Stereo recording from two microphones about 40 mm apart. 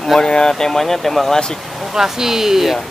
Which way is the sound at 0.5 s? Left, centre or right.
Centre.